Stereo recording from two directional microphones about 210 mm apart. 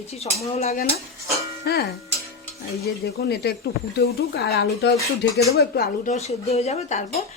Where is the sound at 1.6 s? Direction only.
50° left (ahead or behind).